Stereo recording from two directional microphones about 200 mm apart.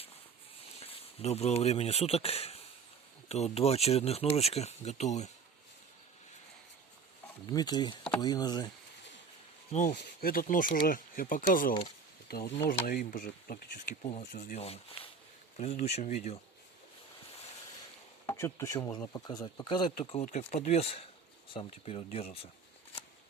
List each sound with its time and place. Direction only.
0.8 s speech: 30° left (ahead or behind)
7.4 s speech: 20° left (ahead or behind)
9.9 s speech: 55° left (ahead or behind); by 16.4 s 35° left (ahead or behind)
18.3 s speech: 15° left (ahead or behind); by 22.3 s 30° left (ahead or behind)